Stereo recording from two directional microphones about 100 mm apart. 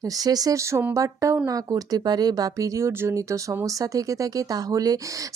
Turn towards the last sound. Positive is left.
turn(degrees=-40)  # may be behind; listen again after turning